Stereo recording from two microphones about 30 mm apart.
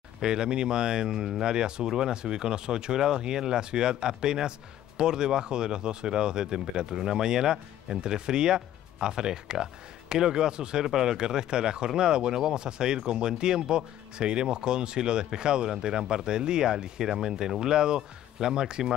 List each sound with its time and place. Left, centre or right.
0.2 s speech: right
17.1 s speech: centre